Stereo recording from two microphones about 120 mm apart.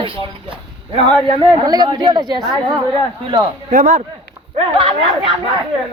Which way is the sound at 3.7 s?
90° right.